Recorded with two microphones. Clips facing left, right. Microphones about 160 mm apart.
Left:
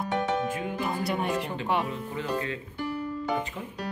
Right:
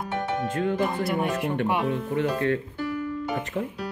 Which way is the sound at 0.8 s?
Centre (ahead or behind).